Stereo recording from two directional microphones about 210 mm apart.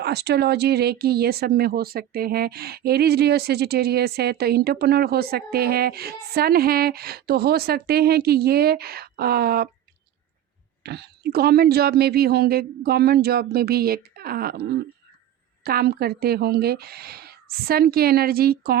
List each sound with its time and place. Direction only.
0.0 s speech: 50° right (ahead or behind)
10.8 s speech: 50° right (ahead or behind)